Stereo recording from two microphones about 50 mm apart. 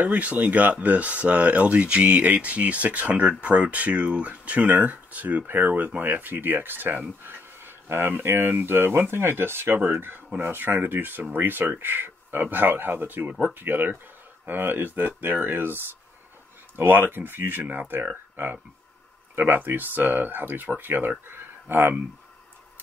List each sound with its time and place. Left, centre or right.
0.0 s speech: right